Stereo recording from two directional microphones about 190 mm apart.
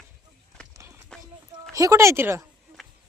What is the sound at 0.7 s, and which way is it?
Music, 15° right (ahead or behind).